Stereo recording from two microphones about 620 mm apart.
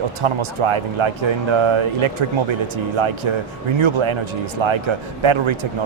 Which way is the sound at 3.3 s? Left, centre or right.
Right.